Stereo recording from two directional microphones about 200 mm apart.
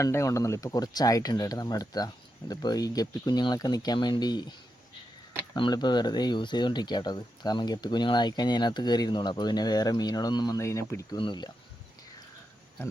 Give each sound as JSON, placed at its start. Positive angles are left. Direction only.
{"t": 0.0, "sound": "speech", "side_deg": 15}
{"t": 5.5, "sound": "speech", "side_deg": 20}